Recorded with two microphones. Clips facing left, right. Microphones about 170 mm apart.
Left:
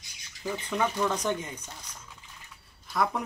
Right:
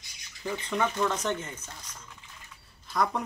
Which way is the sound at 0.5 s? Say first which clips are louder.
Even; 5° left (ahead or behind).